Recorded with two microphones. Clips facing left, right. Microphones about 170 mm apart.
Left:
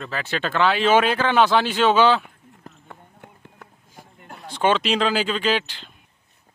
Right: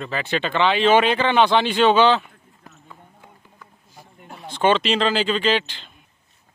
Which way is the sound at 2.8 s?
65° left (ahead or behind).